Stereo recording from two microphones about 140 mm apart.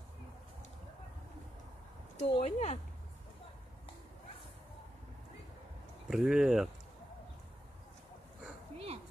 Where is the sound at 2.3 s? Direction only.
50° left (ahead or behind).